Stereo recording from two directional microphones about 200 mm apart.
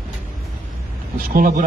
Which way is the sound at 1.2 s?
45° right (ahead or behind).